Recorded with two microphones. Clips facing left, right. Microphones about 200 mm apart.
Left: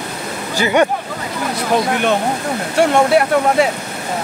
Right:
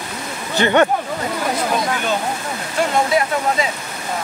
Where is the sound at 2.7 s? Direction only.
65° left (ahead or behind).